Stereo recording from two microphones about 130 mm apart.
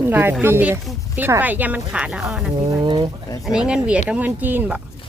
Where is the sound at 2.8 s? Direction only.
40° right (ahead or behind).